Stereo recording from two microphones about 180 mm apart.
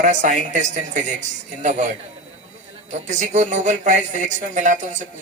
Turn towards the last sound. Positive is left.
turn(degrees=-40)  # may be behind; listen again after turning